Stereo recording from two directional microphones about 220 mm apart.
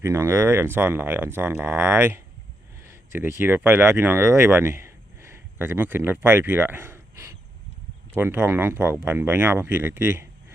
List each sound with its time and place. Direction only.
0.0 s speech: 10° right (ahead or behind)